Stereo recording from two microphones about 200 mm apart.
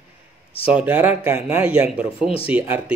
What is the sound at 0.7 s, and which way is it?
Speech, 5° right (ahead or behind).